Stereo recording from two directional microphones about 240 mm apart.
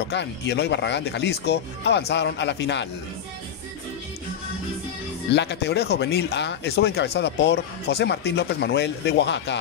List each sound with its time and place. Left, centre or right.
0.1 s speech: left
5.3 s speech: left